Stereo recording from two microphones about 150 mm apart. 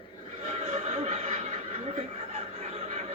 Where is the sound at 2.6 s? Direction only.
50° right (ahead or behind).